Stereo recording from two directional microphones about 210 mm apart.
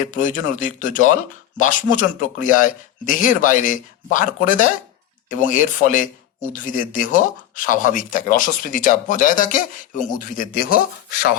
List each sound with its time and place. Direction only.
0.1 s speech: 40° left (ahead or behind)